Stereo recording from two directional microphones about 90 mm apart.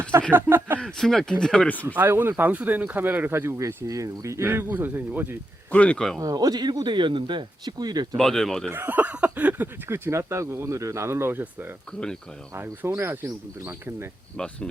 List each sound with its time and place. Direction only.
0.1 s speech: 30° right (ahead or behind)
0.8 s speech: 5° left (ahead or behind)
1.9 s speech: 20° right (ahead or behind)
3.8 s speech: 35° right (ahead or behind); by 5.4 s 20° right (ahead or behind)
5.7 s speech: 15° left (ahead or behind)
6.1 s speech: 40° right (ahead or behind)
8.1 s speech: 5° left (ahead or behind)
8.7 s speech: 20° right (ahead or behind)
14.3 s speech: 10° left (ahead or behind)